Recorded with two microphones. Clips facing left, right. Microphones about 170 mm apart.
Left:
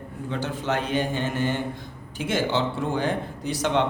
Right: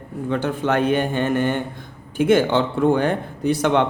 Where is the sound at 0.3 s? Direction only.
55° right (ahead or behind).